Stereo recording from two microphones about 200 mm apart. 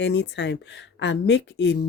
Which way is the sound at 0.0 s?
60° left (ahead or behind).